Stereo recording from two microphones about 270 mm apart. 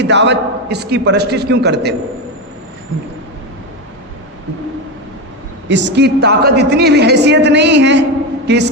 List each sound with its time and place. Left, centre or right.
0.0 s a woman's voice: right
5.6 s a woman's voice: right